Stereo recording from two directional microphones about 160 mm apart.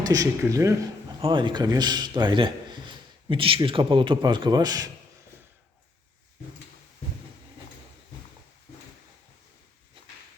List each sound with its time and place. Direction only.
0.1 s a man's voice: 20° right (ahead or behind)
1.2 s a man's voice: 30° right (ahead or behind)